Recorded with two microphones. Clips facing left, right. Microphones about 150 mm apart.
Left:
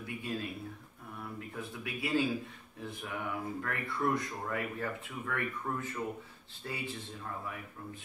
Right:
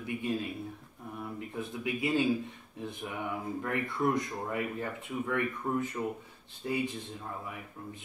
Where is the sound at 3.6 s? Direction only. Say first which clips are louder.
Right 4 dB; 20° right (ahead or behind).